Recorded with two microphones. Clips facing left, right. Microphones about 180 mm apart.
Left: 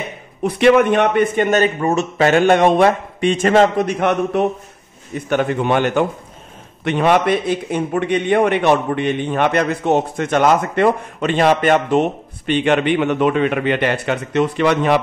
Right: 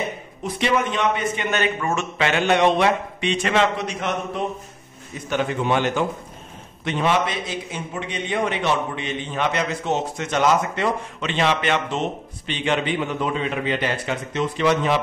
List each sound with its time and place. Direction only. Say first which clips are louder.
0.4 s a man's voice: left 10 dB; 60° left (ahead or behind)